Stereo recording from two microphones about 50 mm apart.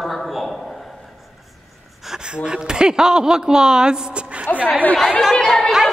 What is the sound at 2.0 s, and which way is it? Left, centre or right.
Speech, centre.